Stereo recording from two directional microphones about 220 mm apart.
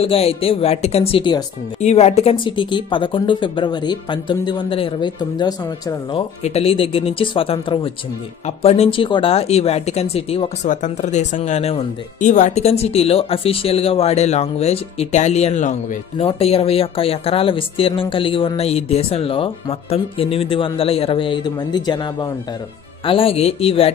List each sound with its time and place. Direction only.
0.0 s speech: 25° left (ahead or behind)